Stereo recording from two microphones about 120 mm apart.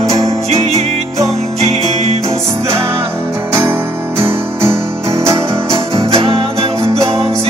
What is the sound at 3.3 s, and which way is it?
Guitar, 20° right (ahead or behind).